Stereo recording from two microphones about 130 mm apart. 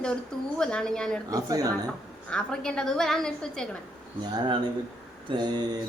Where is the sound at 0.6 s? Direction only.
5° left (ahead or behind).